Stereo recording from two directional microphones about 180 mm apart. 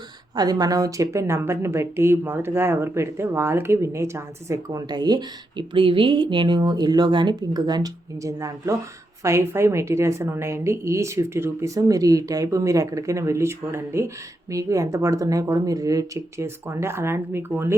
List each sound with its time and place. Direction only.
0.3 s a woman's voice: 20° right (ahead or behind)